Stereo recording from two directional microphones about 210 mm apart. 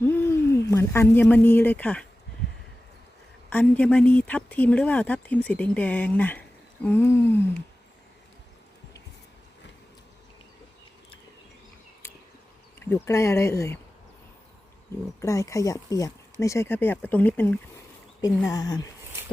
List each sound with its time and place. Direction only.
0.0 s speech: 10° left (ahead or behind)
3.5 s speech: 5° left (ahead or behind)
12.8 s speech: 15° left (ahead or behind)
15.2 s speech: 15° left (ahead or behind)